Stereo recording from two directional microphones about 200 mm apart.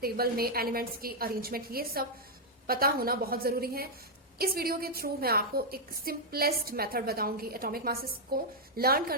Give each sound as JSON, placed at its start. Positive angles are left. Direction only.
{"t": 0.0, "sound": "a woman's voice", "side_deg": -50}